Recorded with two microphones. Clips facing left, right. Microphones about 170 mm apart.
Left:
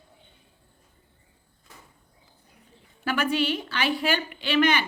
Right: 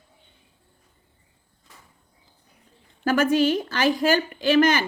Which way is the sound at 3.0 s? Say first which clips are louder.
Right 6 dB; 45° right (ahead or behind).